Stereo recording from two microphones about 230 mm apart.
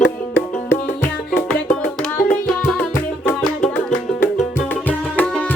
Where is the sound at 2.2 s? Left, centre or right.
Centre.